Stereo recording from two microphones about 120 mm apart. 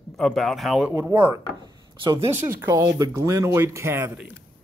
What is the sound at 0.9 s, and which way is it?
Speech, 20° right (ahead or behind).